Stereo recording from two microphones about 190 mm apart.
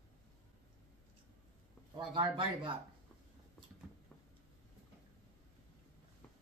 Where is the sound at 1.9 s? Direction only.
25° right (ahead or behind).